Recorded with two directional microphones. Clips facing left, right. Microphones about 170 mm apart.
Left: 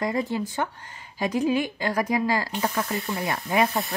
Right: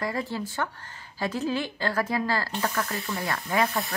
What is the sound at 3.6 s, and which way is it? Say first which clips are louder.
Sizzle: left 2 dB; centre (ahead or behind).